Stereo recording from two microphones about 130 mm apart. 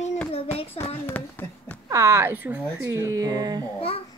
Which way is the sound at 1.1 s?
15° left (ahead or behind).